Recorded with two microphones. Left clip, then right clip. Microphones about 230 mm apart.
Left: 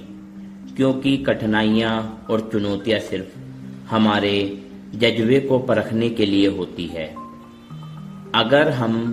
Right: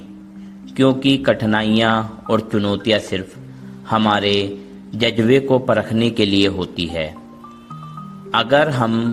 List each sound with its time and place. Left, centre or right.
0.8 s a man's voice: right
8.3 s a man's voice: right